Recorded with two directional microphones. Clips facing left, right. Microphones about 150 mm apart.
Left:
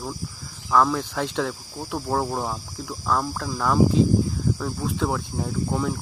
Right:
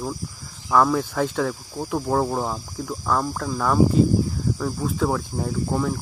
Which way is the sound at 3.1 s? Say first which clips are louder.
Right 1 dB; 10° right (ahead or behind).